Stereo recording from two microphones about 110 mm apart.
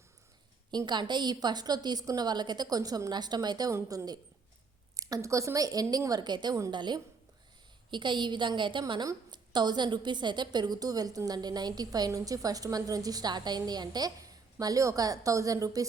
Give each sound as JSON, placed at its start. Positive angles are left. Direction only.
{"t": 0.7, "sound": "a woman's voice", "side_deg": -40}
{"t": 3.7, "sound": "a woman's voice", "side_deg": -30}